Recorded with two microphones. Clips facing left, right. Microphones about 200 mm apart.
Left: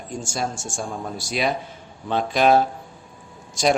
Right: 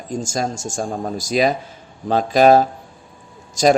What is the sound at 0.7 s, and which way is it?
Speech, 45° right (ahead or behind).